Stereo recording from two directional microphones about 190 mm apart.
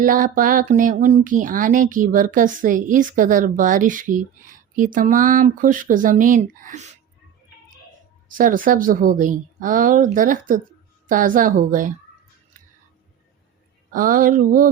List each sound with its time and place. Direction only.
0.0 s a woman's voice: 45° right (ahead or behind)
8.3 s a woman's voice: 45° right (ahead or behind)
13.9 s a woman's voice: 45° right (ahead or behind)